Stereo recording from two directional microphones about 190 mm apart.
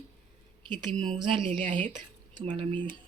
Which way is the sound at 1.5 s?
30° right (ahead or behind).